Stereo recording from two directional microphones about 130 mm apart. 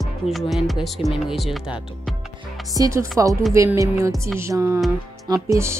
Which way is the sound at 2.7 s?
25° right (ahead or behind).